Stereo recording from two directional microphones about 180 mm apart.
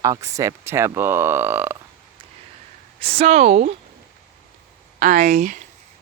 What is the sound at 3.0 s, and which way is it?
Speech, 35° right (ahead or behind).